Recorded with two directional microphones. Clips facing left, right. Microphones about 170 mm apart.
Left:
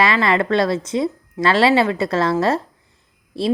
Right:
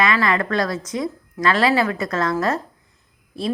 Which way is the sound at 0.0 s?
30° left (ahead or behind).